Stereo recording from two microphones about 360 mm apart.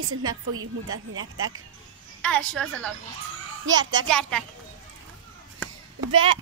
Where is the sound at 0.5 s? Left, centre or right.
Right.